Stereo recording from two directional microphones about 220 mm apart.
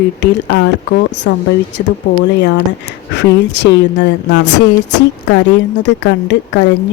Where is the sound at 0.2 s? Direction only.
50° left (ahead or behind).